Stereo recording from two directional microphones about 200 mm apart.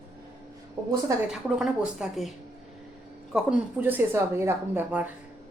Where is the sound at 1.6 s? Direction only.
Centre (ahead or behind).